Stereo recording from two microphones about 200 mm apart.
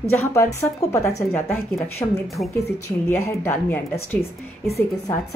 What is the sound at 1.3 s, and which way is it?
Speech, 10° left (ahead or behind).